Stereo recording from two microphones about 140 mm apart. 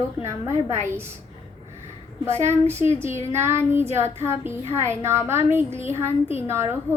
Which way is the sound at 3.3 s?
20° right (ahead or behind).